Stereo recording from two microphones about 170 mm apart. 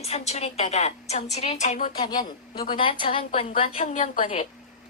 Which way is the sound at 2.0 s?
25° left (ahead or behind).